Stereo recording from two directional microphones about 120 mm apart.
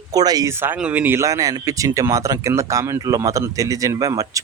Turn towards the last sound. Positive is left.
turn(degrees=-30)  # may be behind; listen again after turning